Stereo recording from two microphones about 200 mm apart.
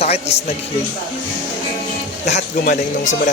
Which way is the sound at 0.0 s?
30° left (ahead or behind).